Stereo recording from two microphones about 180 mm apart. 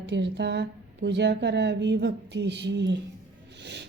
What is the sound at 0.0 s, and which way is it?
A woman's voice, 70° right (ahead or behind).